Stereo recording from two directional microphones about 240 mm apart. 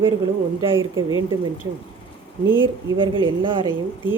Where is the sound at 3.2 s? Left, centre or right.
Right.